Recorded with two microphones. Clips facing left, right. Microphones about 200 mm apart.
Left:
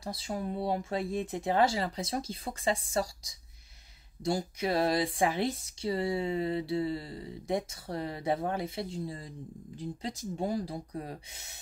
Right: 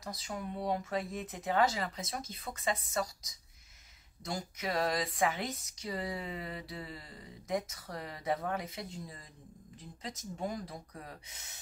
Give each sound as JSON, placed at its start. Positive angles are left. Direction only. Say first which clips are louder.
{"t": 0.0, "sound": "speech", "louder": "left 5 dB", "side_deg": 30}